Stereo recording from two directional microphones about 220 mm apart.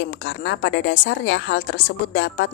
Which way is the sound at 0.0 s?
55° left (ahead or behind).